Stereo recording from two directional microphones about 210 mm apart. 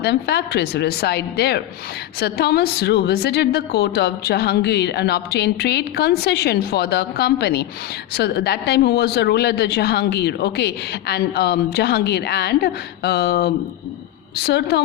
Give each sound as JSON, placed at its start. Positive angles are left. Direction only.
{"t": 0.0, "sound": "a woman's voice", "side_deg": 50}